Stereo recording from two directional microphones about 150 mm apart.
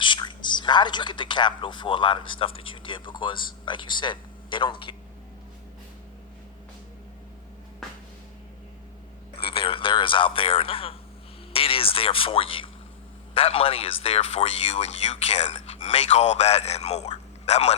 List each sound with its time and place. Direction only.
0.0 s a man's voice: 30° left (ahead or behind)
9.5 s a sound: 35° left (ahead or behind)
13.3 s speech: 40° left (ahead or behind)